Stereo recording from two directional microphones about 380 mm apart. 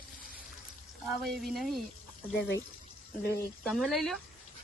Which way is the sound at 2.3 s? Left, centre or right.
Left.